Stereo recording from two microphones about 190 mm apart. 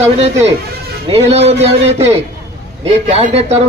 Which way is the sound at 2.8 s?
35° right (ahead or behind).